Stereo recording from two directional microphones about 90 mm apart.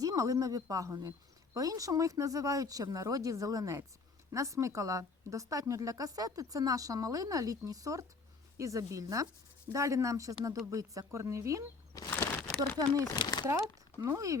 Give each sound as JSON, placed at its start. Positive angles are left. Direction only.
{"t": 0.0, "sound": "speech", "side_deg": -40}
{"t": 12.1, "sound": "crumpling", "side_deg": 25}
{"t": 12.8, "sound": "speech", "side_deg": -45}
{"t": 13.1, "sound": "speech", "side_deg": 50}
{"t": 13.4, "sound": "speech", "side_deg": -30}